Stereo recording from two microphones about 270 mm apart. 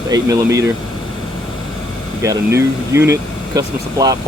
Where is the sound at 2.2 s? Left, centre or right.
Centre.